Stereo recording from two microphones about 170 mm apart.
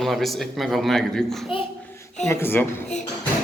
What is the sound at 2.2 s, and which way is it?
Speech, 15° left (ahead or behind).